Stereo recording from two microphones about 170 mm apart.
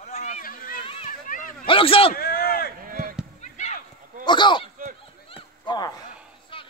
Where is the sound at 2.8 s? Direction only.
55° right (ahead or behind).